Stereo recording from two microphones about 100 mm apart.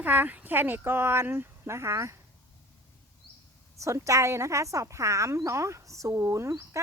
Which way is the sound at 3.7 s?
30° right (ahead or behind).